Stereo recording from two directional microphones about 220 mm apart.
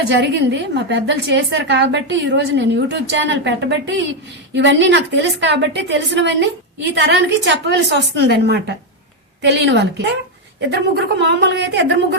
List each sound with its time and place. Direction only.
0.1 s a woman's voice: 55° right (ahead or behind)